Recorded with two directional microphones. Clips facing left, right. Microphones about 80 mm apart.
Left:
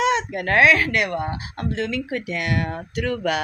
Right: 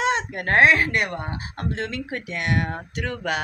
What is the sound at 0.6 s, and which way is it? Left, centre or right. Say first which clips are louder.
Speech: even; right.